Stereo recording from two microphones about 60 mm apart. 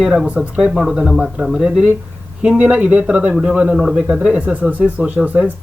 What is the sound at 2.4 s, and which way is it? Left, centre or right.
Speech, centre.